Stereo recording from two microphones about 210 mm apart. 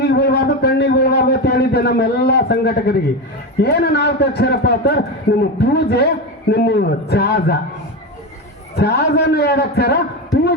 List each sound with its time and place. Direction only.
0.0 s a man's voice: 50° left (ahead or behind)
8.7 s a man's voice: 50° left (ahead or behind)